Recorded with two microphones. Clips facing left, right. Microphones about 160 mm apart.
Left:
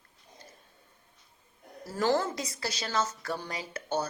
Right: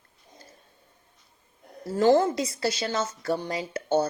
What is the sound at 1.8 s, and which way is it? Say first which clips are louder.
A woman's voice: right 8 dB; 25° right (ahead or behind).